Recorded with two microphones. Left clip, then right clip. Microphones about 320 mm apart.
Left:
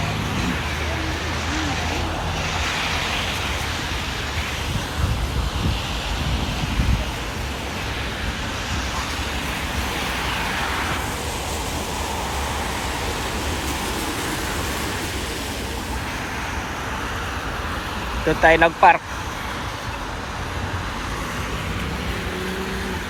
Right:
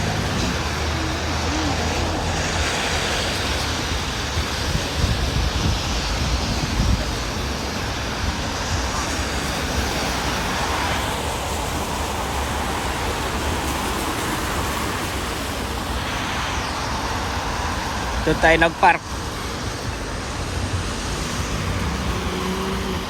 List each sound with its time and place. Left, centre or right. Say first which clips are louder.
2.6 s vehicle: even; right
18.3 s speech: left 1 dB; centre